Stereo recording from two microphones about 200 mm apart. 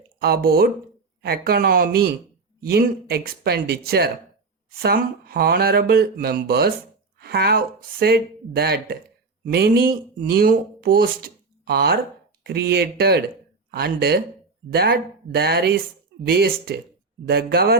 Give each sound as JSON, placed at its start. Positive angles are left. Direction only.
{"t": 0.2, "sound": "speech", "side_deg": -50}